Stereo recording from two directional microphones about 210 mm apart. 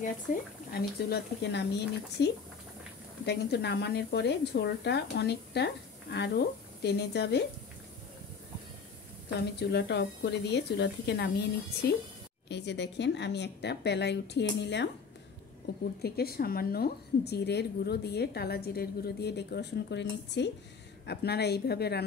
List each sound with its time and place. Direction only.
0.0 s a woman's voice: 45° left (ahead or behind)
9.7 s a woman's voice: 55° left (ahead or behind)
16.0 s a woman's voice: 45° left (ahead or behind)